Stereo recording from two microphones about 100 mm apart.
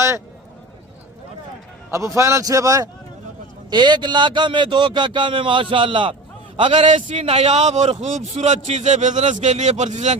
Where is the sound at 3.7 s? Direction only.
45° right (ahead or behind).